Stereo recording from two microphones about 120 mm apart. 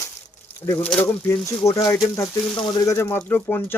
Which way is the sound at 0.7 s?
15° left (ahead or behind).